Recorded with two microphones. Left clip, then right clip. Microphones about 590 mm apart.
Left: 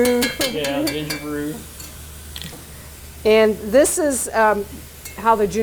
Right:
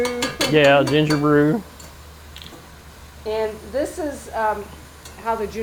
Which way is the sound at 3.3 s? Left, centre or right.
Left.